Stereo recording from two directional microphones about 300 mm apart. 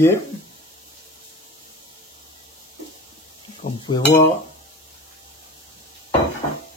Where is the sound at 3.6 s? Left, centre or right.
Centre.